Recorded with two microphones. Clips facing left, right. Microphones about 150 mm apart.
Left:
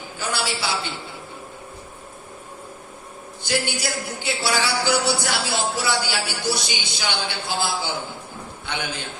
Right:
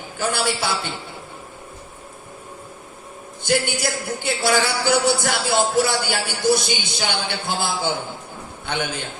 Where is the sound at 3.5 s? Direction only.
50° right (ahead or behind).